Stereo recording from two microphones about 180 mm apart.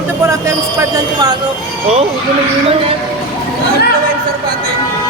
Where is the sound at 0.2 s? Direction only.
15° right (ahead or behind).